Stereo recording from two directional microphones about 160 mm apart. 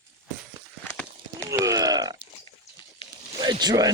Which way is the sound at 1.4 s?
20° right (ahead or behind).